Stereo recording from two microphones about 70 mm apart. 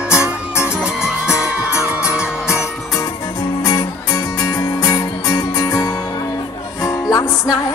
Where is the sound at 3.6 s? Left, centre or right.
Left.